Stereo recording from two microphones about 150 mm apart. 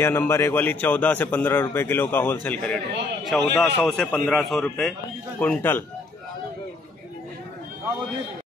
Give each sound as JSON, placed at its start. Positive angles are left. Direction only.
{"t": 0.0, "sound": "a man's voice", "side_deg": 15}